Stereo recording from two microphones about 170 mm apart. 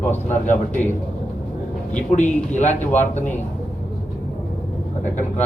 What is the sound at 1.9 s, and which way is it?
Speech, 45° left (ahead or behind).